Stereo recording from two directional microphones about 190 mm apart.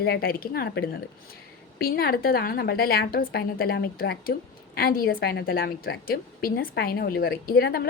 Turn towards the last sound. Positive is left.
turn(degrees=55)  # may be behind; listen again after turning